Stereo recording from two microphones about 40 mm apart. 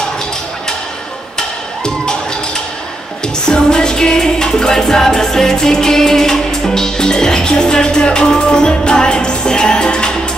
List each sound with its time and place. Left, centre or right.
3.4 s music: centre